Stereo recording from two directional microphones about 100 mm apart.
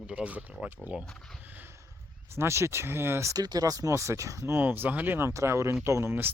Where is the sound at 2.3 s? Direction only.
25° right (ahead or behind).